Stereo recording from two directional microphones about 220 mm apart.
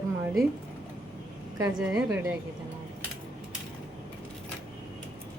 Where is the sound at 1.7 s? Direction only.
5° right (ahead or behind).